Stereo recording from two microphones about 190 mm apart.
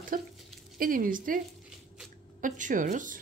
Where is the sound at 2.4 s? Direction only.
45° right (ahead or behind).